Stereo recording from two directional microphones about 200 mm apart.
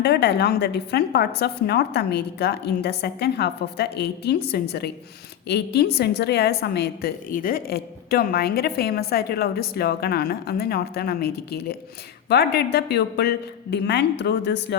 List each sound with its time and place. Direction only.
0.0 s a woman's voice: 55° left (ahead or behind)